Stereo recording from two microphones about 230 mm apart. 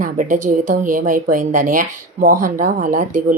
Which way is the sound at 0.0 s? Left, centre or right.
Right.